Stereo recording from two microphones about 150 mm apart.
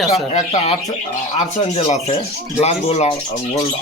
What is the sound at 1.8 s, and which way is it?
Speech, 45° left (ahead or behind).